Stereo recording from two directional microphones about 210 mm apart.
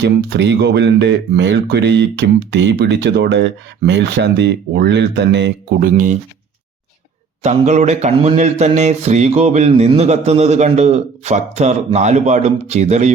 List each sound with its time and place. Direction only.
0.0 s speech: 55° right (ahead or behind)
7.4 s speech: 35° right (ahead or behind)